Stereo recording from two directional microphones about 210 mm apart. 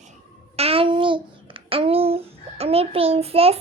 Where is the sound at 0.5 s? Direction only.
30° right (ahead or behind).